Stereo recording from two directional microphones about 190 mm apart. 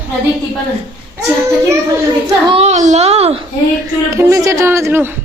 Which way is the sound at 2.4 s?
30° right (ahead or behind).